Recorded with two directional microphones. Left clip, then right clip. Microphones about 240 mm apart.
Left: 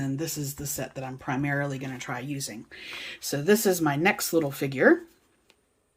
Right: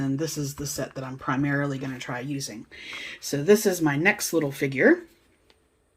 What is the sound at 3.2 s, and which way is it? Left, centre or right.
Speech, left.